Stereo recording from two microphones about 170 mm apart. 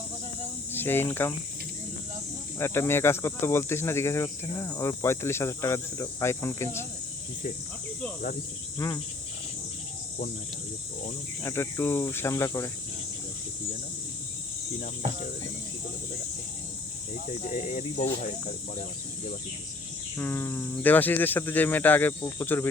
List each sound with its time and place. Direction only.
0.7 s speech: 10° left (ahead or behind)
2.6 s speech: 15° left (ahead or behind)
11.4 s speech: 15° left (ahead or behind)
17.5 s speech: 50° left (ahead or behind)
20.1 s speech: 10° left (ahead or behind)